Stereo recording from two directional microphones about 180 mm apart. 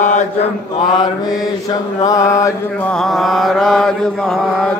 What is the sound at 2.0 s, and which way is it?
Mantra, 20° left (ahead or behind).